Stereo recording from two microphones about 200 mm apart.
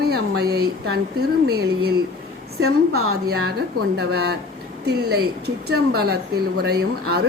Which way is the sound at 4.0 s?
55° right (ahead or behind).